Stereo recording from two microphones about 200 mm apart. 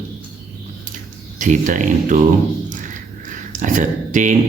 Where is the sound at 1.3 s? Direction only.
40° right (ahead or behind).